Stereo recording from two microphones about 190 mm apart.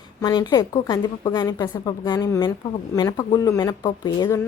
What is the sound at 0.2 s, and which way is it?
Speech, 20° left (ahead or behind).